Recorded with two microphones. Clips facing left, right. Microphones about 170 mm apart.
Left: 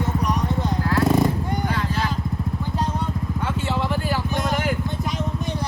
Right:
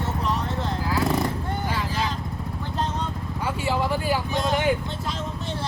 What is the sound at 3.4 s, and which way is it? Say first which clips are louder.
Vehicle: right 1 dB; 5° right (ahead or behind).